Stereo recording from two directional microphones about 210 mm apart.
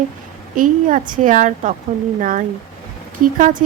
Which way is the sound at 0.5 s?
40° right (ahead or behind).